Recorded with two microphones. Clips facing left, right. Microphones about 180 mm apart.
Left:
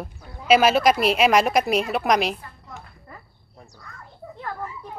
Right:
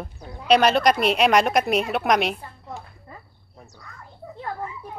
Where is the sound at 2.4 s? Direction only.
30° right (ahead or behind).